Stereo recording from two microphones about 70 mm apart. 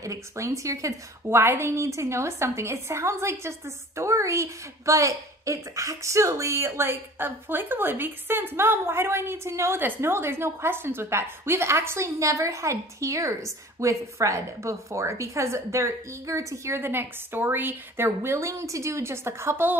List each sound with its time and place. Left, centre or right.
0.0 s speech: right
1.3 s a woman's voice: right
16.8 s a woman's voice: right